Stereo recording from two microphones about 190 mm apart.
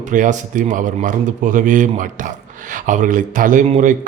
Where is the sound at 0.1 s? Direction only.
45° right (ahead or behind).